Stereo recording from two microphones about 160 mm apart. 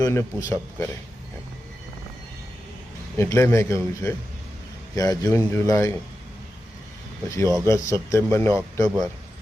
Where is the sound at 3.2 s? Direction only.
15° left (ahead or behind).